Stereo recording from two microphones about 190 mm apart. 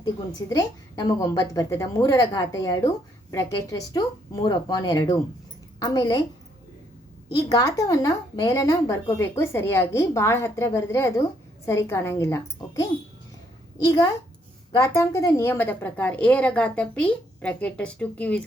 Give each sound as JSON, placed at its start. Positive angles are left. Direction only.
{"t": 0.0, "sound": "a woman's voice", "side_deg": 20}
{"t": 7.3, "sound": "a woman's voice", "side_deg": 20}